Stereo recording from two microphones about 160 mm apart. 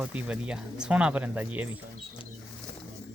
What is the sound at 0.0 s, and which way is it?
Speech, 10° right (ahead or behind).